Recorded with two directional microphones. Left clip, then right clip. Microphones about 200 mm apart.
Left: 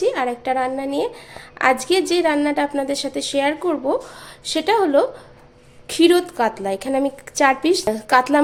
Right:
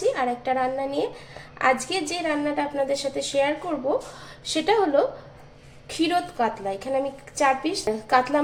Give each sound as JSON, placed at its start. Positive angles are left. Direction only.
{"t": 0.0, "sound": "a woman's voice", "side_deg": 45}
{"t": 4.4, "sound": "a woman's voice", "side_deg": 30}
{"t": 5.9, "sound": "a woman's voice", "side_deg": 55}